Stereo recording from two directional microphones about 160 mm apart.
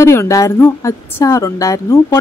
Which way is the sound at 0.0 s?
15° left (ahead or behind).